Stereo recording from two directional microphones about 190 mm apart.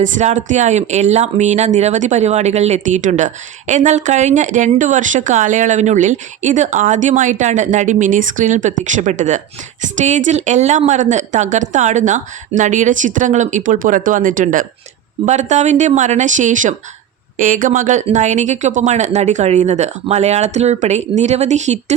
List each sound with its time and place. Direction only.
0.0 s speech: 40° right (ahead or behind)